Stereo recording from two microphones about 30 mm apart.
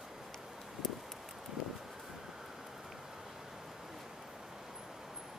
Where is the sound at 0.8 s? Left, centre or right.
Centre.